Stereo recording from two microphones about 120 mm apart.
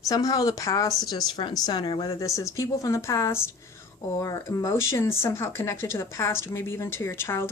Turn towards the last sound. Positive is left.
turn(degrees=20)  # may be behind; listen again after turning